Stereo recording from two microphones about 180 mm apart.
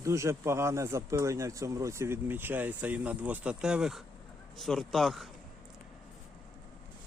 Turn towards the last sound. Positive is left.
turn(degrees=0)  # may be behind; listen again after turning